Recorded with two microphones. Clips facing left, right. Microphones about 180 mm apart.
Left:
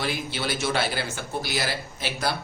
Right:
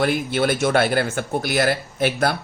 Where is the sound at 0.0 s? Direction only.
55° right (ahead or behind).